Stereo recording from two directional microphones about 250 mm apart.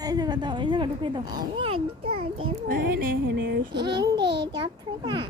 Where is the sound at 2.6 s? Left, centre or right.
Right.